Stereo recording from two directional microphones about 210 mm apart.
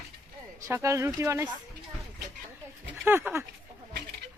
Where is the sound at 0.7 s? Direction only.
15° right (ahead or behind).